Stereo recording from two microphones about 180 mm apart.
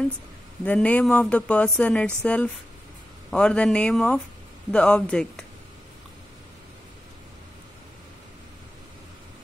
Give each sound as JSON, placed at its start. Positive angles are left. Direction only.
{"t": 0.7, "sound": "speech", "side_deg": 10}